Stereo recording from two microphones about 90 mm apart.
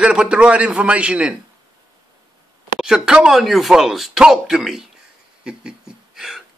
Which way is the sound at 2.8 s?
5° right (ahead or behind).